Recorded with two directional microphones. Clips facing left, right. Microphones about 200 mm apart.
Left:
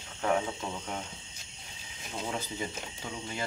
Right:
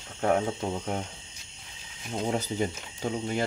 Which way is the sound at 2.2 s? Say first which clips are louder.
Right 8 dB; 40° right (ahead or behind).